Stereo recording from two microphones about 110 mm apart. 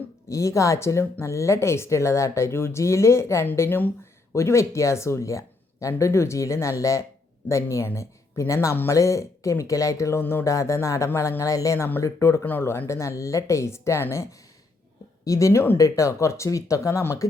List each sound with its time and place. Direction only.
0.3 s speech: 30° left (ahead or behind)